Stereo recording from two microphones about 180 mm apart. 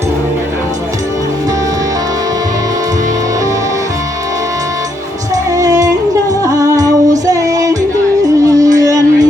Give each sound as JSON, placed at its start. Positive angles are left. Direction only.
{"t": 5.3, "sound": "music", "side_deg": -20}